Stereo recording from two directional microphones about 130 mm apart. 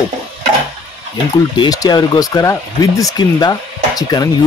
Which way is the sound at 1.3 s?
30° left (ahead or behind).